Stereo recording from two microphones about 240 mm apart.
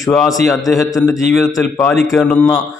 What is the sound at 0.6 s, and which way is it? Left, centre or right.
A man's voice, centre.